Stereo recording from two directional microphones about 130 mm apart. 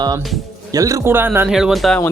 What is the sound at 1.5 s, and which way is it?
Speech, 5° right (ahead or behind).